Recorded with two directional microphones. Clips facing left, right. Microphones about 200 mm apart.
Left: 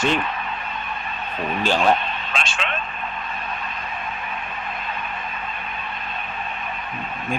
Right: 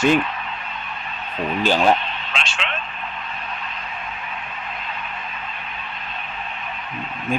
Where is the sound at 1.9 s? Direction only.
45° left (ahead or behind).